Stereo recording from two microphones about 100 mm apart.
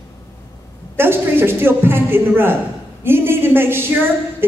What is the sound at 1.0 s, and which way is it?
A woman's voice, 25° right (ahead or behind).